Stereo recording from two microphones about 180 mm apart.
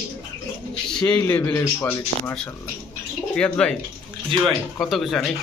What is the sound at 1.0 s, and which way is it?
Speech, 10° left (ahead or behind).